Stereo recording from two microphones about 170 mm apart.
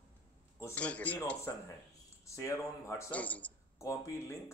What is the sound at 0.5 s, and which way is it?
Speech, 10° left (ahead or behind).